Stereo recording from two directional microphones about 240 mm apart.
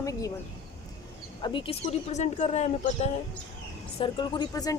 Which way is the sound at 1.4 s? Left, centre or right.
Centre.